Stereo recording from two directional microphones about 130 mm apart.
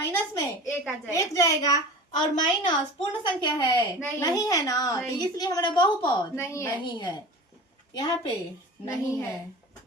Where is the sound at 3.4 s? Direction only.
35° left (ahead or behind).